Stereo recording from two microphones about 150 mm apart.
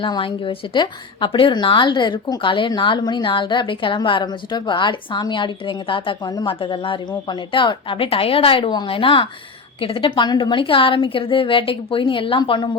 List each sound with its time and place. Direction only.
0.0 s a woman's voice: 35° left (ahead or behind)